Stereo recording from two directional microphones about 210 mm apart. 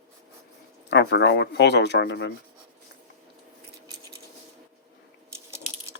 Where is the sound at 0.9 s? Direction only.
55° left (ahead or behind).